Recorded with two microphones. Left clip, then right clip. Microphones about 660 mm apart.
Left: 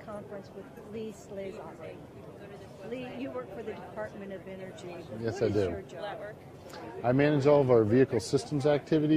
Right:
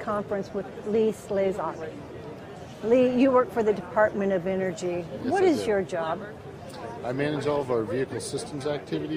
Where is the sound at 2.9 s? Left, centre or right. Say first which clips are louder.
Right 19 dB; right.